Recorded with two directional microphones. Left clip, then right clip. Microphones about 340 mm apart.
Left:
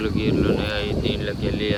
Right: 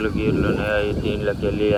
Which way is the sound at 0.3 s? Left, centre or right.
Centre.